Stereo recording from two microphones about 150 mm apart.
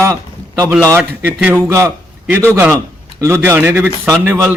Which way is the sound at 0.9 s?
10° right (ahead or behind).